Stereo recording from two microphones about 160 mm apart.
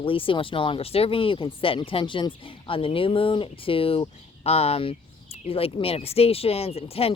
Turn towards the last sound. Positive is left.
turn(degrees=40)  # may be behind; listen again after turning